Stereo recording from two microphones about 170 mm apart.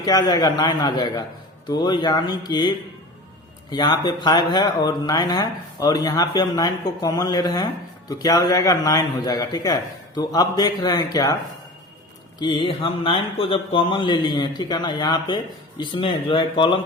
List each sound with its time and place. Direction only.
0.0 s speech: 25° left (ahead or behind)
12.4 s speech: 30° left (ahead or behind)